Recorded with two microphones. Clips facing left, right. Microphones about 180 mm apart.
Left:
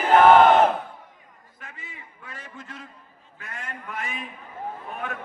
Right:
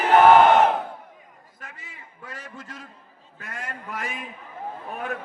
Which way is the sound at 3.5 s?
40° right (ahead or behind).